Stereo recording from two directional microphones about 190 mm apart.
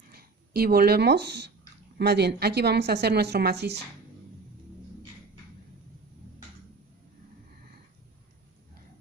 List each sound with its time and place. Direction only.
0.1 s a woman's voice: 55° right (ahead or behind)